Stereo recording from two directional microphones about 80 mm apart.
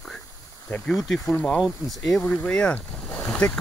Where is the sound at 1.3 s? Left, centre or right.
Centre.